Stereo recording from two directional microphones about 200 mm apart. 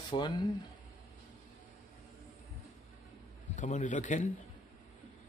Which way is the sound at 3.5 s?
35° left (ahead or behind).